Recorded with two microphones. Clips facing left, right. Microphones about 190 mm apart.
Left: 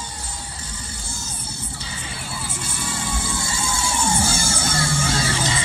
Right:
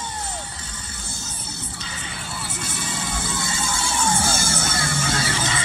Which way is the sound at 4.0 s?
10° left (ahead or behind).